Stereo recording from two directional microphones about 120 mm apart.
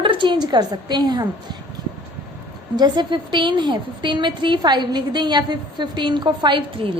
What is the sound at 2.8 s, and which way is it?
A woman's voice, 40° right (ahead or behind).